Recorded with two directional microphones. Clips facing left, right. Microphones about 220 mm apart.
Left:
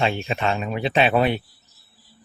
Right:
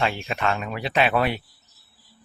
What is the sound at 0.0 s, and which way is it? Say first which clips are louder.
Speech: left 2 dB; 25° left (ahead or behind).